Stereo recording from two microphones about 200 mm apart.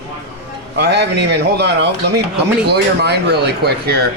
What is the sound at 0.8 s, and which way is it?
Speech, 55° right (ahead or behind).